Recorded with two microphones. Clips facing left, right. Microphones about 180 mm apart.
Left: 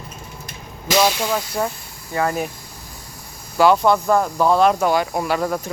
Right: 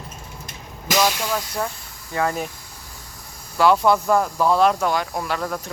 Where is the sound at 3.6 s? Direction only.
Centre (ahead or behind).